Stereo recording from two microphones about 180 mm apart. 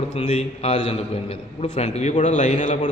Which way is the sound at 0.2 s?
30° left (ahead or behind).